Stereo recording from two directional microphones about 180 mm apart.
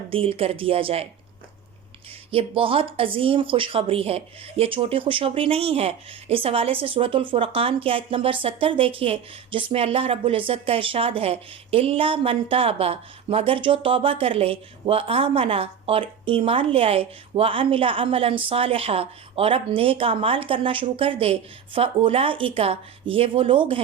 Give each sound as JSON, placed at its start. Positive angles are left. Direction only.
{"t": 0.1, "sound": "speech", "side_deg": -30}
{"t": 2.3, "sound": "speech", "side_deg": -30}